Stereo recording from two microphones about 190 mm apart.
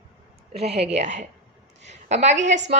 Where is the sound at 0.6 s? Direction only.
35° right (ahead or behind).